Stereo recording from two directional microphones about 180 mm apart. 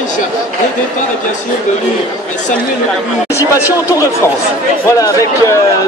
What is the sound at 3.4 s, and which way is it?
Speech, 15° left (ahead or behind).